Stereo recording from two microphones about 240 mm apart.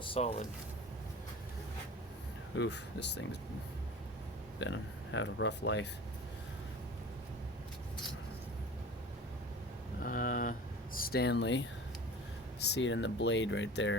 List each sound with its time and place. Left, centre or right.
0.0 s speech: left
2.6 s speech: left
4.6 s speech: left
10.0 s a sound: left
10.9 s speech: left